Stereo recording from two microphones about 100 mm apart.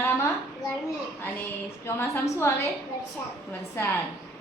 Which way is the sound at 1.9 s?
25° left (ahead or behind).